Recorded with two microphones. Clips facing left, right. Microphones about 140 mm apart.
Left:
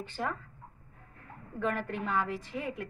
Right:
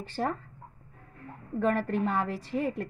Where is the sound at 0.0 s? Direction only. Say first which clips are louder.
Right 4 dB; 35° right (ahead or behind).